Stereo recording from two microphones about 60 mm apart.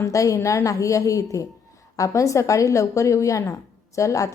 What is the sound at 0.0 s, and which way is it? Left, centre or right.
A woman's voice, left.